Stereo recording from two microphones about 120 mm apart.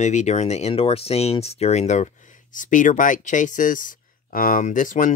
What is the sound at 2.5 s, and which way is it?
Speech, 90° left.